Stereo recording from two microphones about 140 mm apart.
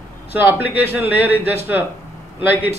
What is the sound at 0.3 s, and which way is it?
Speech, 15° right (ahead or behind).